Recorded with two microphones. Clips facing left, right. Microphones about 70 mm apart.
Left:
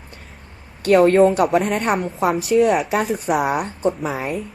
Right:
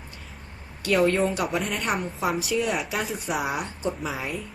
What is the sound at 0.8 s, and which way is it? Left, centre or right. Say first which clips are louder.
A woman's voice: left 9 dB; left.